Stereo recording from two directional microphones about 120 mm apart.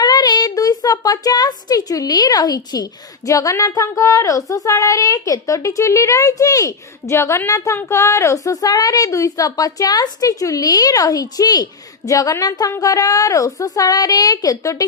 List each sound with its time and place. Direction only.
0.0 s speech: 35° left (ahead or behind)